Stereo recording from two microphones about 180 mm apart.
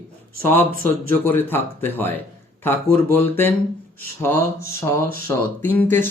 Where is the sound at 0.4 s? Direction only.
10° left (ahead or behind).